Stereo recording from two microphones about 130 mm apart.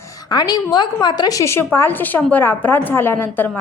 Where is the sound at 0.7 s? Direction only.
35° left (ahead or behind); by 3.6 s 15° left (ahead or behind).